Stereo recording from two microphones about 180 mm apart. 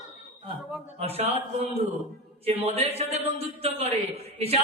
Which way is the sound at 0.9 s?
35° right (ahead or behind).